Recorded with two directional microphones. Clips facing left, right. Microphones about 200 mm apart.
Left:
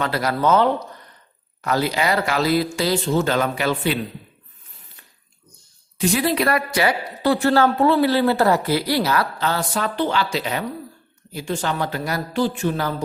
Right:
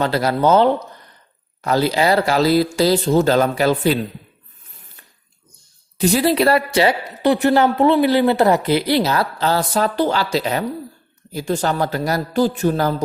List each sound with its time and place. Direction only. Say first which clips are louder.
0.0 s a woman's voice: right 4 dB; 30° right (ahead or behind)
6.0 s a woman's voice: right 4 dB; 35° right (ahead or behind)